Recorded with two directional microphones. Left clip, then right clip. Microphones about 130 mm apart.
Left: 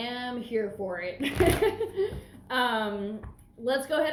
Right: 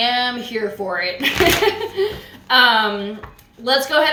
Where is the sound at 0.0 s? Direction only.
15° right (ahead or behind).